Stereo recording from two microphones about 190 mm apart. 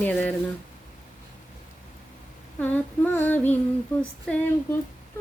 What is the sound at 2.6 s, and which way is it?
Child singing, 10° left (ahead or behind).